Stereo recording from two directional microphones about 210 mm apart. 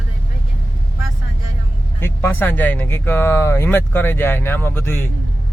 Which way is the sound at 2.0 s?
10° left (ahead or behind).